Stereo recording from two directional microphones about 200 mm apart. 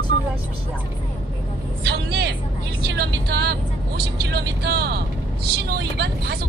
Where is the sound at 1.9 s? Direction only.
55° right (ahead or behind).